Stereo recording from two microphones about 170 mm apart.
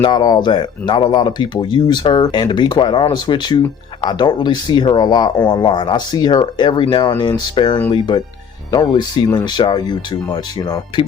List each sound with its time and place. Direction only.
0.0 s speech: 25° left (ahead or behind)